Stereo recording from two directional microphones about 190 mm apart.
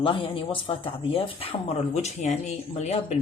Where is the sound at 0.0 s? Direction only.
25° left (ahead or behind).